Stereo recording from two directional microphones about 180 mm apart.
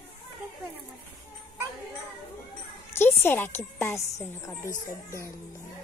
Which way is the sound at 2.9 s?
10° left (ahead or behind).